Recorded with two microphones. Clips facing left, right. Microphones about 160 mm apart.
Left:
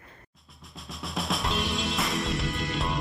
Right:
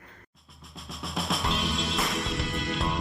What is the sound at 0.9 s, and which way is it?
Music, centre (ahead or behind).